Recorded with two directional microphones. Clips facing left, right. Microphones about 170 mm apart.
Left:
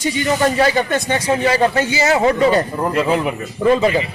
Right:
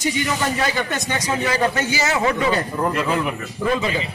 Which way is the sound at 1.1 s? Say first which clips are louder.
Left 5 dB; 30° left (ahead or behind).